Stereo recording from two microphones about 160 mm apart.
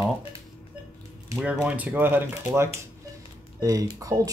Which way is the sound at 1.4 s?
10° right (ahead or behind).